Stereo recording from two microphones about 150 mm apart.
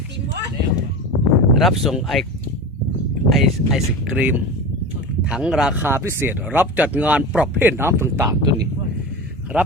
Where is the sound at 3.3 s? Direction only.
Centre (ahead or behind); by 8.3 s 20° right (ahead or behind).